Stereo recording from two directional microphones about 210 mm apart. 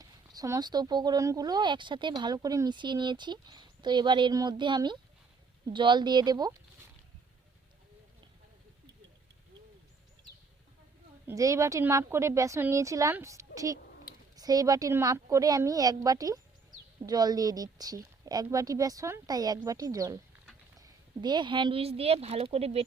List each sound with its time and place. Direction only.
0.0 s speech: 15° right (ahead or behind)
11.3 s a woman's voice: 15° right (ahead or behind)